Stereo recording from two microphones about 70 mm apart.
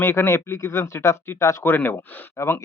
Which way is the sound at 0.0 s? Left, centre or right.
Left.